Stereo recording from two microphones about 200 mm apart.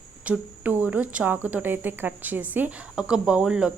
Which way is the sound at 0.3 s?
10° right (ahead or behind).